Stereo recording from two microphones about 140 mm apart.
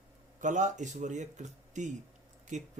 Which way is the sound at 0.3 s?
65° right (ahead or behind).